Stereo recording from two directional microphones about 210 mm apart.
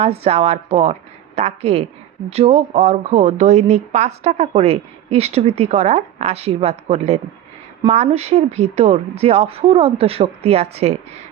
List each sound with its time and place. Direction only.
0.0 s speech: 30° right (ahead or behind)